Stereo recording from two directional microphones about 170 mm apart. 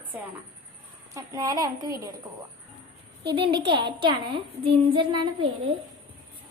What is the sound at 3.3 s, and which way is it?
A woman's voice, 30° right (ahead or behind).